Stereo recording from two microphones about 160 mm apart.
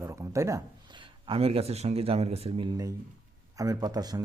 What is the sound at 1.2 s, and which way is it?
Speech, 35° right (ahead or behind).